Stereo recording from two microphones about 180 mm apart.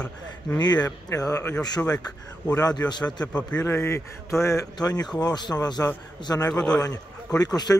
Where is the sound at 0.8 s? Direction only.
20° left (ahead or behind).